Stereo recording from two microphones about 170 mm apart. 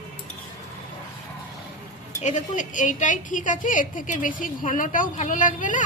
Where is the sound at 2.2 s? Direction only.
45° left (ahead or behind).